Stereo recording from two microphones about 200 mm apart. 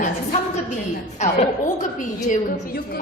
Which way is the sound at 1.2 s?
35° left (ahead or behind).